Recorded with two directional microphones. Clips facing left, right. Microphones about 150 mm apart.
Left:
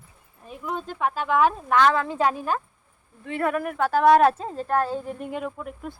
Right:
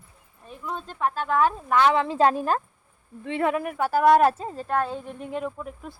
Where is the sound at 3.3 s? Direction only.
25° right (ahead or behind); by 5.9 s centre (ahead or behind).